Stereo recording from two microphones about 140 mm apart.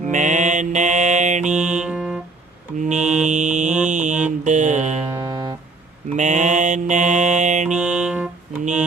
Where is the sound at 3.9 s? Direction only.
60° right (ahead or behind).